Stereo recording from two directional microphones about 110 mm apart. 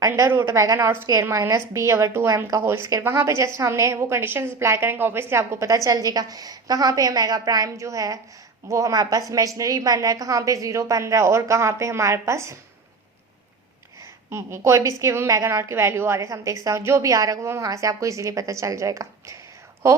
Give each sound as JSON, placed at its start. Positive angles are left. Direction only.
{"t": 0.1, "sound": "a woman's voice", "side_deg": -20}
{"t": 14.3, "sound": "a woman's voice", "side_deg": -25}